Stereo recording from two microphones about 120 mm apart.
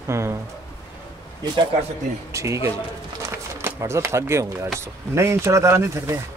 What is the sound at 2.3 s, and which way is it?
Speech, 25° right (ahead or behind).